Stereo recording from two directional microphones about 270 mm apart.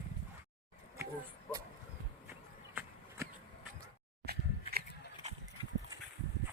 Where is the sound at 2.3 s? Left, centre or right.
Centre.